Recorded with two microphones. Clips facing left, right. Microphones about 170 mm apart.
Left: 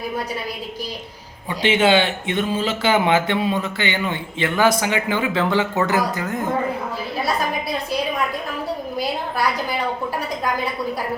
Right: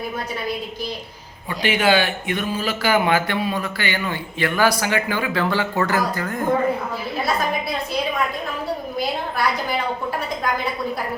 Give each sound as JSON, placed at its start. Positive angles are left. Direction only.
{"t": 1.5, "sound": "a man's voice", "side_deg": 25}